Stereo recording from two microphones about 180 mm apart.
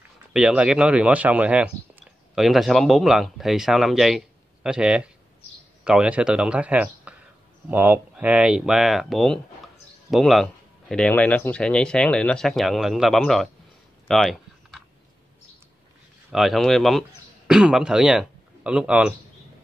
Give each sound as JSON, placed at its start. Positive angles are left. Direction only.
{"t": 0.3, "sound": "speech", "side_deg": -5}
{"t": 14.0, "sound": "a sound", "side_deg": 0}
{"t": 16.3, "sound": "speech", "side_deg": 0}